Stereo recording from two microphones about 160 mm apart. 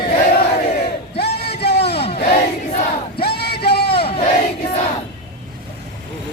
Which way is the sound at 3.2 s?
85° left.